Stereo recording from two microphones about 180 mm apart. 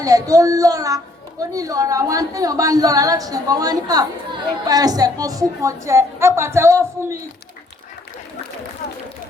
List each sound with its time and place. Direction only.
0.0 s a child's voice: 20° right (ahead or behind)